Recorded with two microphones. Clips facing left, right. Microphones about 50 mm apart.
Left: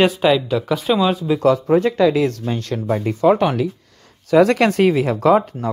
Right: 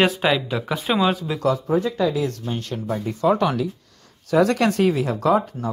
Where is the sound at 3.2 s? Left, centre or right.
Left.